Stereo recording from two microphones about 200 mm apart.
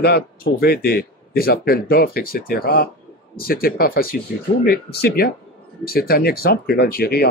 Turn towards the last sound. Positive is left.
turn(degrees=50)  # may be behind; listen again after turning